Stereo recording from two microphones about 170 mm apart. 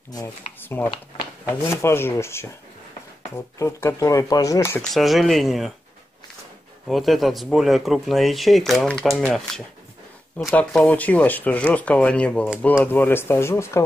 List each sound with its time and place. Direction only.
0.6 s speech: 10° left (ahead or behind)
3.5 s speech: 15° left (ahead or behind)
4.9 s speech: centre (ahead or behind)
6.9 s speech: centre (ahead or behind)
10.5 s speech: 5° left (ahead or behind)